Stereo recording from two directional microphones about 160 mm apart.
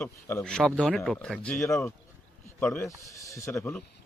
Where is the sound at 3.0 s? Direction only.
20° left (ahead or behind).